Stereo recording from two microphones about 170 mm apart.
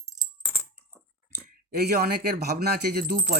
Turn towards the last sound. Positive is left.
turn(degrees=-60)  # may be behind; listen again after turning